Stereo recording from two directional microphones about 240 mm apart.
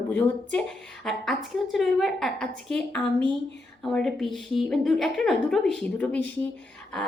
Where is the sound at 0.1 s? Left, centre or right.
Centre.